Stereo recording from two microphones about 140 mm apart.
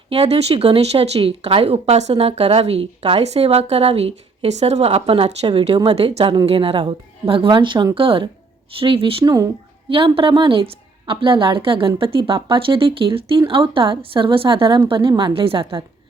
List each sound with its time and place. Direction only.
0.1 s a woman's voice: 50° right (ahead or behind)
9.2 s speech: 25° right (ahead or behind)
9.9 s a woman's voice: 40° right (ahead or behind)